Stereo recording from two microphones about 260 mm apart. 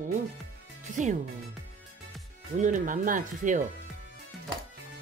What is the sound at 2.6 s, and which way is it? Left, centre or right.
Speech, right.